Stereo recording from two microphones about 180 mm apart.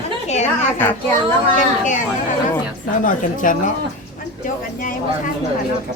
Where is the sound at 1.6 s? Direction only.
45° left (ahead or behind).